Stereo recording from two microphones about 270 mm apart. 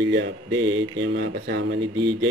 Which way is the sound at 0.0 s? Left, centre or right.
Right.